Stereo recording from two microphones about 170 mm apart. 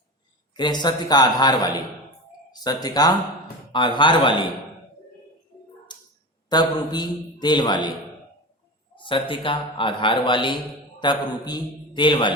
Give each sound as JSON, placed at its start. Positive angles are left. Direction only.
{"t": 0.5, "sound": "a man's voice", "side_deg": 25}
{"t": 5.9, "sound": "a sound", "side_deg": 25}
{"t": 6.5, "sound": "a man's voice", "side_deg": 25}
{"t": 9.0, "sound": "a man's voice", "side_deg": 30}